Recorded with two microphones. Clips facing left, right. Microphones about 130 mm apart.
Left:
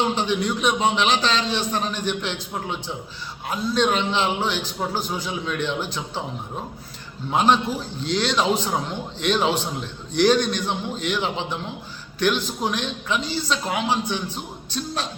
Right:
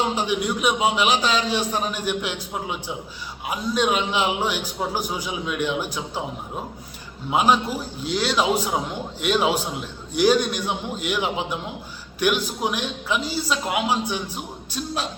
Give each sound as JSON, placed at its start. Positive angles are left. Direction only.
{"t": 0.0, "sound": "a man's voice", "side_deg": -10}
{"t": 7.3, "sound": "a man's voice", "side_deg": -10}